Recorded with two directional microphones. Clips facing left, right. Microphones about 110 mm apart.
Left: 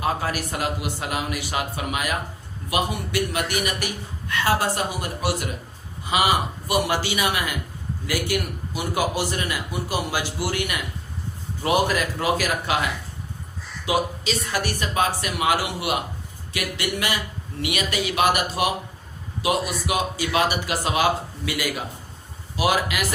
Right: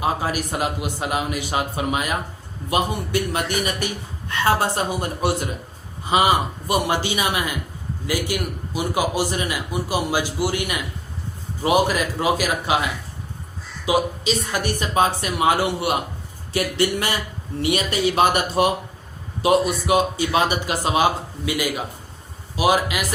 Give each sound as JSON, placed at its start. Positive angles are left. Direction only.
{"t": 0.0, "sound": "a man's voice", "side_deg": -20}
{"t": 12.2, "sound": "a man's voice", "side_deg": -20}
{"t": 13.8, "sound": "a man's voice", "side_deg": -20}